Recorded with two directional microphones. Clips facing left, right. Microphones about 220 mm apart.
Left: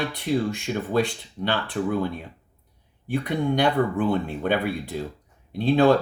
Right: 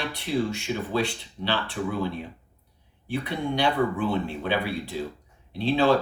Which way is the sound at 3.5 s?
50° left (ahead or behind).